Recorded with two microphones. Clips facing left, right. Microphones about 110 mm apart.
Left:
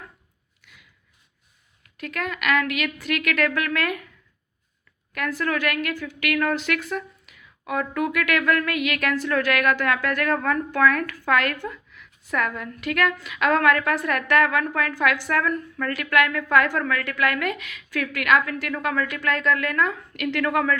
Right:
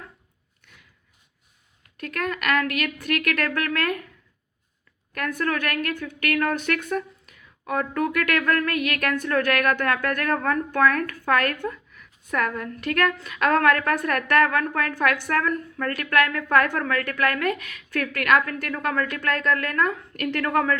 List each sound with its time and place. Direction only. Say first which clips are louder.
2.0 s speech: right 1 dB; 45° right (ahead or behind)
5.1 s speech: even; 40° right (ahead or behind)
5.9 s a woman's voice: even; 55° right (ahead or behind)
6.3 s a woman's voice: even; 45° right (ahead or behind)
6.9 s a sound: right 3 dB; 40° right (ahead or behind)
7.7 s a woman's voice: even; 40° right (ahead or behind)